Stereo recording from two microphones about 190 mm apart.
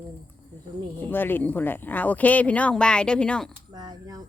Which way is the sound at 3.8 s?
20° right (ahead or behind).